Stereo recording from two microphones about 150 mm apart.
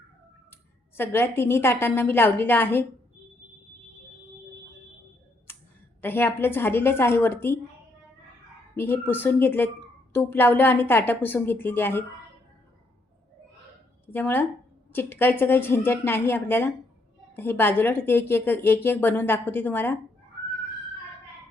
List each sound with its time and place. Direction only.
0.9 s speech: 15° left (ahead or behind)
5.5 s a sound: 15° left (ahead or behind)
6.0 s speech: 15° left (ahead or behind)
8.7 s speech: 15° left (ahead or behind)
14.1 s speech: 15° left (ahead or behind)